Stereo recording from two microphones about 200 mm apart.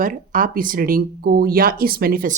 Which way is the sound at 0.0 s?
45° right (ahead or behind).